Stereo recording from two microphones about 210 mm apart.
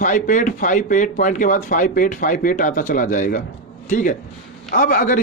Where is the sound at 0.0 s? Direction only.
35° left (ahead or behind).